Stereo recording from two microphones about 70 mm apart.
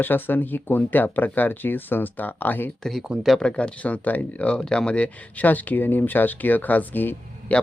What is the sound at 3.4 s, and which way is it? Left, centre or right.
Speech, centre.